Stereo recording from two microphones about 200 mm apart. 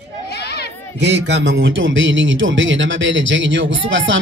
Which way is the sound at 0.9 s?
60° right (ahead or behind).